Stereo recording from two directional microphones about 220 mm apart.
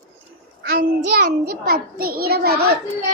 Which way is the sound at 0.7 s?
45° right (ahead or behind).